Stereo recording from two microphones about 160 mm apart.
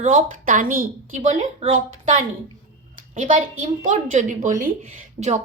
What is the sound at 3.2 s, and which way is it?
A woman's voice, 55° right (ahead or behind).